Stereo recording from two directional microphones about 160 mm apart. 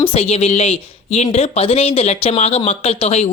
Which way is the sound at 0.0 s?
40° left (ahead or behind).